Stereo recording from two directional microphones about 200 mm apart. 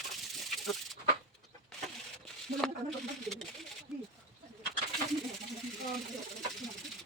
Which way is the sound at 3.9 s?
5° right (ahead or behind).